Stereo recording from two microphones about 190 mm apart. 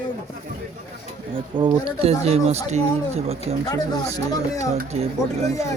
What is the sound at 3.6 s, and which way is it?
Speech, 20° left (ahead or behind).